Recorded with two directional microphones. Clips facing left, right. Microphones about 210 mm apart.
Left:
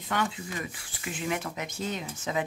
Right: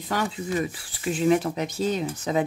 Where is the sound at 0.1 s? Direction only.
35° right (ahead or behind).